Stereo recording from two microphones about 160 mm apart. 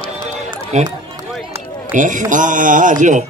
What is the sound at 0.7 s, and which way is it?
A man's voice, 45° right (ahead or behind).